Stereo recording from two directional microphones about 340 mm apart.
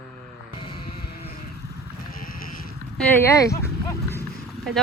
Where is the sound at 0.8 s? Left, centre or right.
Left.